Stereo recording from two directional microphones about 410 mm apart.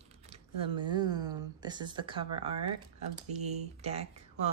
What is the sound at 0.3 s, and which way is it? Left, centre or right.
Speech, centre.